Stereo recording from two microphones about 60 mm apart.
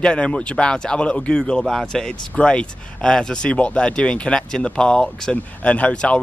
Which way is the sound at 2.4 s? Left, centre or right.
Centre.